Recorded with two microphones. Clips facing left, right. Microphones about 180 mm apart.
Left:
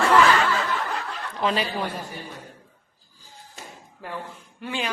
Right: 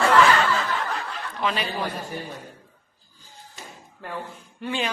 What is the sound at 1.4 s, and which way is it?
Speech, 35° left (ahead or behind).